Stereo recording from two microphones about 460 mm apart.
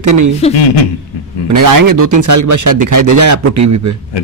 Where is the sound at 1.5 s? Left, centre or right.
Right.